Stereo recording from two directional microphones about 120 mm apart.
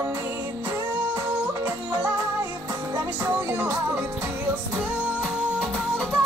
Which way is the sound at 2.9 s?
20° right (ahead or behind).